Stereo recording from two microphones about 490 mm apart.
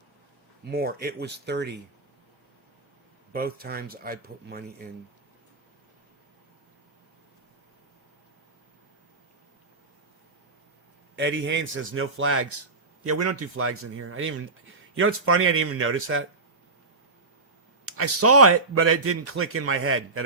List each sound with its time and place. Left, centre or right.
0.6 s a man's voice: centre
3.3 s speech: centre
11.2 s a man's voice: right
17.8 s a man's voice: right